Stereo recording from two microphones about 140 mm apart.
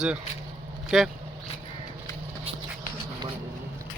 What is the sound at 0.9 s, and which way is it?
Speech, 5° right (ahead or behind).